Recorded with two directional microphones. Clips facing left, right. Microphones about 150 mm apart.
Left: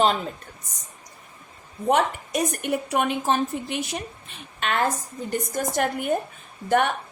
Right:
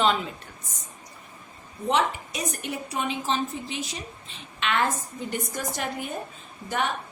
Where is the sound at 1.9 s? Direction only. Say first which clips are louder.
Left 3 dB; 55° left (ahead or behind).